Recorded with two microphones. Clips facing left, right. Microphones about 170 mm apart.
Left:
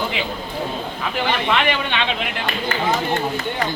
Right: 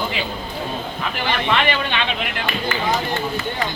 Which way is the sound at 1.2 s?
15° left (ahead or behind).